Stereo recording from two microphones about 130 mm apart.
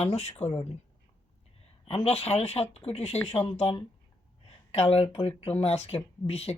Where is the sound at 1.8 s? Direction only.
50° left (ahead or behind).